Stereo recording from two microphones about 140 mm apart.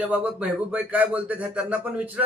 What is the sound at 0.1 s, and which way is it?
Speech, 10° right (ahead or behind).